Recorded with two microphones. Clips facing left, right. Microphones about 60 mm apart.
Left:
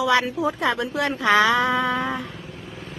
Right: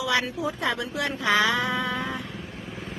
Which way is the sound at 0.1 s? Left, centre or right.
Left.